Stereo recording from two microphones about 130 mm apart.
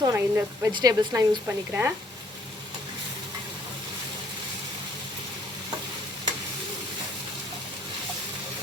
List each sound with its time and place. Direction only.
0.0 s speech: 20° right (ahead or behind)
0.7 s speech: 30° right (ahead or behind)